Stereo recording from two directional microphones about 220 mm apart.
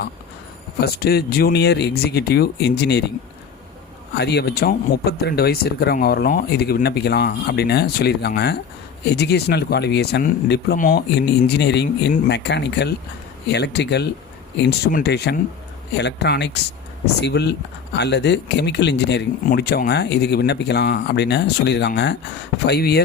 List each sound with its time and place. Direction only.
0.8 s speech: 45° left (ahead or behind)
4.1 s speech: 50° left (ahead or behind)